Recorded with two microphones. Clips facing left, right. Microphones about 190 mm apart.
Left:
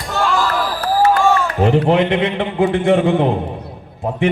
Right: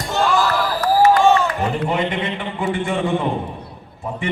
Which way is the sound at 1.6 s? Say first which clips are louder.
Left 7 dB; 70° left (ahead or behind).